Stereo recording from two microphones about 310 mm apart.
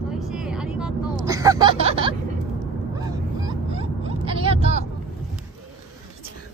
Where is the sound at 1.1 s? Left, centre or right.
Centre.